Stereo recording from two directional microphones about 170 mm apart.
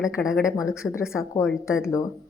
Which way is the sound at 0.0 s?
Centre (ahead or behind).